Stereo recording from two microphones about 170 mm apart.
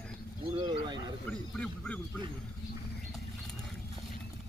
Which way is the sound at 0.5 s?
25° right (ahead or behind).